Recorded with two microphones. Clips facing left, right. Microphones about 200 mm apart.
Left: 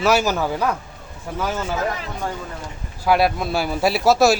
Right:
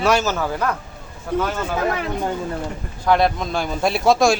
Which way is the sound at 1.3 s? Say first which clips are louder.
Right 6 dB; 65° right (ahead or behind).